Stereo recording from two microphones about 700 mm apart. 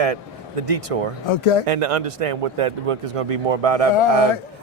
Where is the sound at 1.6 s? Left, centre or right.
Right.